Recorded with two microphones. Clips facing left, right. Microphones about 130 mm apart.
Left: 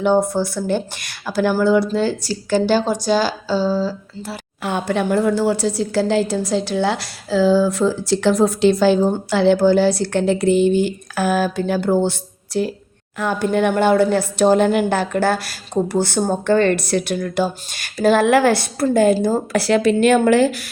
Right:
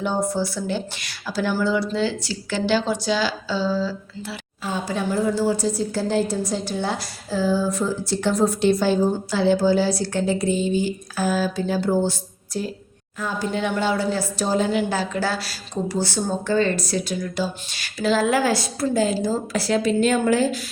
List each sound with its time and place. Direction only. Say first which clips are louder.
0.0 s speech: left 7 dB; 60° left (ahead or behind); by 4.4 s 40° left (ahead or behind)
4.6 s a woman's voice: left 5 dB; 65° left (ahead or behind)